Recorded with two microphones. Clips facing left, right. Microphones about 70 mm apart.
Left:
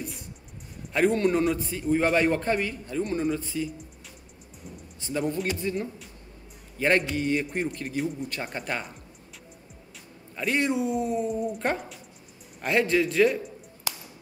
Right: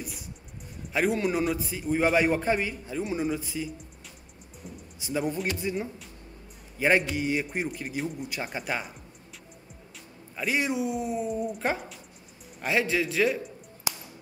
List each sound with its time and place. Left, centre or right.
0.0 s music: centre
0.9 s a man's voice: centre
4.9 s a man's voice: centre
10.3 s a man's voice: centre
13.9 s a sound: centre